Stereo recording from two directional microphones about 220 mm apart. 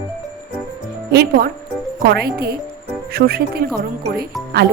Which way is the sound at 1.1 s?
45° right (ahead or behind).